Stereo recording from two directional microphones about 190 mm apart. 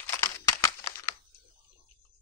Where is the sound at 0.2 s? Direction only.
15° left (ahead or behind).